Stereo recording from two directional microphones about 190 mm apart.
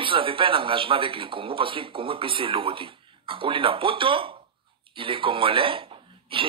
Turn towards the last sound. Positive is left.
turn(degrees=-30)  # may be behind; listen again after turning